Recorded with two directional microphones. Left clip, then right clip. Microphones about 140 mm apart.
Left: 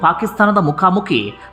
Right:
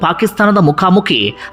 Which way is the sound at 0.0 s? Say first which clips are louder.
Right 1 dB; 25° right (ahead or behind).